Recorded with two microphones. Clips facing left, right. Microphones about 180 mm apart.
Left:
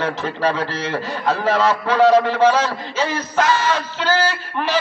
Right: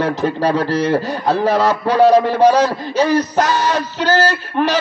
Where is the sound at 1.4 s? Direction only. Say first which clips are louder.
Right 3 dB; 40° right (ahead or behind).